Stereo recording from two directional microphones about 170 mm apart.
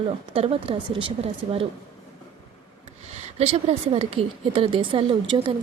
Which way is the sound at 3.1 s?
40° right (ahead or behind).